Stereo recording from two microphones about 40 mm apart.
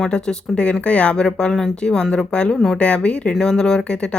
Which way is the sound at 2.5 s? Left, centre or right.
Centre.